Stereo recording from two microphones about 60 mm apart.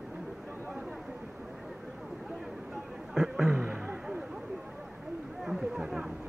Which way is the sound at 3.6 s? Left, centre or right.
Right.